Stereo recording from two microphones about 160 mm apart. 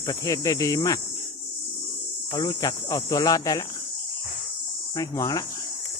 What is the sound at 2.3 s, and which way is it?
Cricket, 25° left (ahead or behind).